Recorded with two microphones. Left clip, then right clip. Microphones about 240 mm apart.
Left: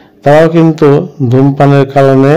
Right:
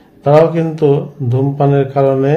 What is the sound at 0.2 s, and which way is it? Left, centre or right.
A man's voice, left.